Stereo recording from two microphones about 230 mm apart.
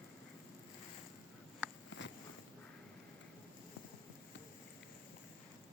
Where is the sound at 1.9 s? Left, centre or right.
Left.